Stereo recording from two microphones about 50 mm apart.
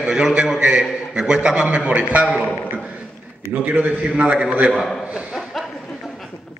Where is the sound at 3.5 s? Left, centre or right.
Right.